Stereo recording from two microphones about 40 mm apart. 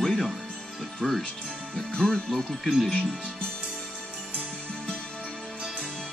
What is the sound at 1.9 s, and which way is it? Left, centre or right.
Speech, centre.